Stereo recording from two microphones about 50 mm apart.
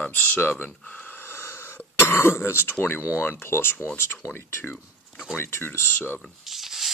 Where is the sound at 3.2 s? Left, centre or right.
Left.